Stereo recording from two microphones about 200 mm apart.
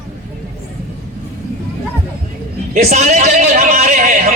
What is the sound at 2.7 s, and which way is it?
Speech, 35° right (ahead or behind).